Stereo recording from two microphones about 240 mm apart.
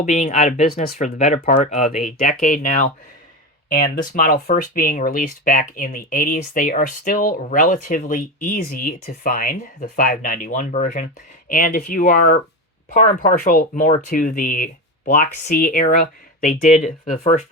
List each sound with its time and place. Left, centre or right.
0.0 s speech: left